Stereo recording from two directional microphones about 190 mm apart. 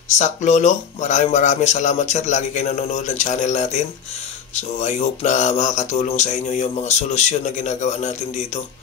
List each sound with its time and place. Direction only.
0.1 s speech: 40° left (ahead or behind)